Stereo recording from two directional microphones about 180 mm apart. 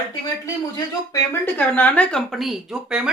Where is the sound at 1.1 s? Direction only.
10° left (ahead or behind).